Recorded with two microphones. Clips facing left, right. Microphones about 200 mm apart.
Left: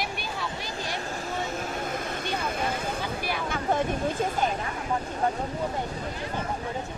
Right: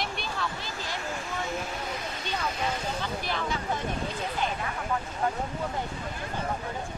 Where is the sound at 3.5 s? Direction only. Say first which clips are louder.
Left 5 dB; 50° left (ahead or behind).